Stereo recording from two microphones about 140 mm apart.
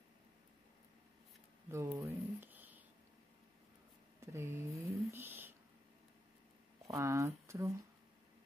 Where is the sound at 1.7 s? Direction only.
15° right (ahead or behind).